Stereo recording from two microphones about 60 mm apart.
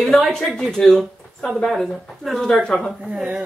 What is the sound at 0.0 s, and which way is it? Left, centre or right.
Speech, centre.